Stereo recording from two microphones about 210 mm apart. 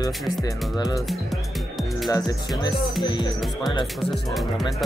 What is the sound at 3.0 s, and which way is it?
Speech, 20° left (ahead or behind).